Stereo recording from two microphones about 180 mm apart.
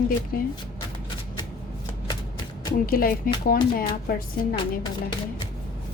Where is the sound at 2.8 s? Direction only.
55° left (ahead or behind).